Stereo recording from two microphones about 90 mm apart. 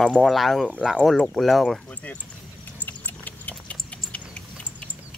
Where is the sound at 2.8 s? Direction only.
20° left (ahead or behind).